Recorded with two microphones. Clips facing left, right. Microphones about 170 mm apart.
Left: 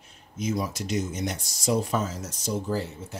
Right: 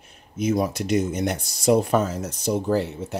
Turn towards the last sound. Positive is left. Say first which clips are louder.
# right 7 dB
turn(degrees=-65)  # may be behind; listen again after turning